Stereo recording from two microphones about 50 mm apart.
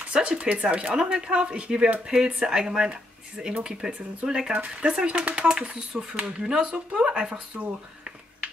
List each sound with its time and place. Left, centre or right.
0.1 s speech: centre